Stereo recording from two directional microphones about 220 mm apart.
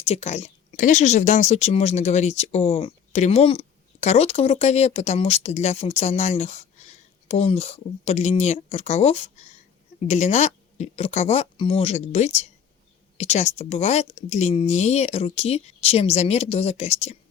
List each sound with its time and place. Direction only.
0.0 s speech: 30° left (ahead or behind)